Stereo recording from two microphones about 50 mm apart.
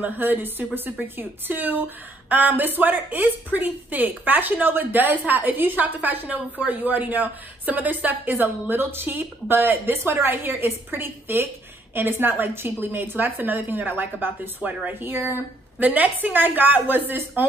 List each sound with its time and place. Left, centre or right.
0.0 s speech: right
15.8 s speech: right